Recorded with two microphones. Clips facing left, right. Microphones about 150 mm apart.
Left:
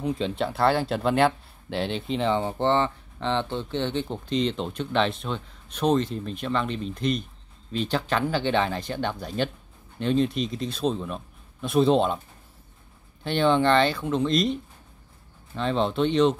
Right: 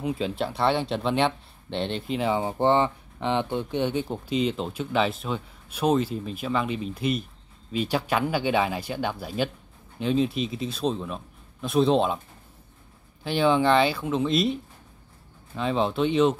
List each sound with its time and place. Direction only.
0.0 s speech: 5° right (ahead or behind)
13.2 s speech: 5° right (ahead or behind)